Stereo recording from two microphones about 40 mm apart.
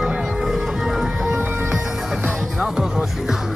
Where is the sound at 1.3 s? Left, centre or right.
Right.